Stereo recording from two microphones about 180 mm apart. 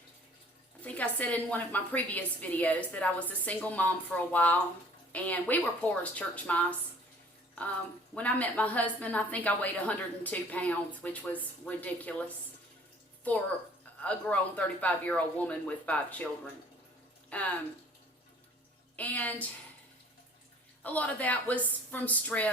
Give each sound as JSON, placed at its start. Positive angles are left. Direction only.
{"t": 0.9, "sound": "a woman's voice", "side_deg": 5}
{"t": 8.1, "sound": "a woman's voice", "side_deg": 10}
{"t": 14.0, "sound": "a woman's voice", "side_deg": 5}
{"t": 17.2, "sound": "speech", "side_deg": 5}
{"t": 18.9, "sound": "a woman's voice", "side_deg": 10}
{"t": 20.8, "sound": "a woman's voice", "side_deg": 10}